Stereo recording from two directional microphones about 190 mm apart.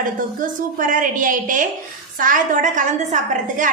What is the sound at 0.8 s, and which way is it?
A woman's voice, 45° right (ahead or behind).